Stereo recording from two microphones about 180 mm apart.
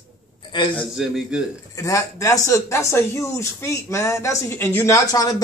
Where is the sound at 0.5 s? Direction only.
25° left (ahead or behind).